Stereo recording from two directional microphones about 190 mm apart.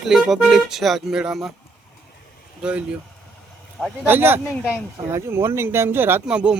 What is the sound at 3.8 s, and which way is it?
Speech, 10° right (ahead or behind).